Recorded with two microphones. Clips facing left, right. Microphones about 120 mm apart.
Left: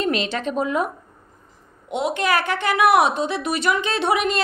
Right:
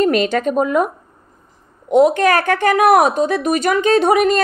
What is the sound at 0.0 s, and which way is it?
A woman's voice, 50° right (ahead or behind).